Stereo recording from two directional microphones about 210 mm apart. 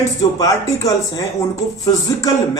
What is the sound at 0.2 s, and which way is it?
Speech, 15° left (ahead or behind).